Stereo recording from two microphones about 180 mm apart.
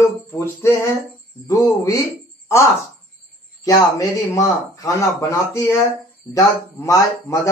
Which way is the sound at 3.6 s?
20° left (ahead or behind).